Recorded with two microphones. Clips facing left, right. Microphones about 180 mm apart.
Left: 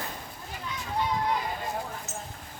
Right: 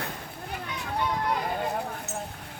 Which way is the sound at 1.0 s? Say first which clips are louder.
Even; 60° right (ahead or behind).